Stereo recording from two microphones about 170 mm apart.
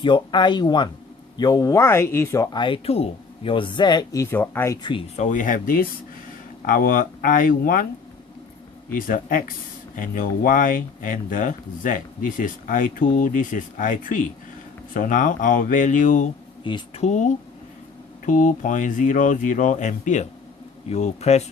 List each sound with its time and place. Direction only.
0.0 s speech: 25° left (ahead or behind)
5.1 s speech: 45° left (ahead or behind)
8.9 s speech: 55° left (ahead or behind)
16.6 s speech: 25° left (ahead or behind)
17.0 s speech: 45° left (ahead or behind)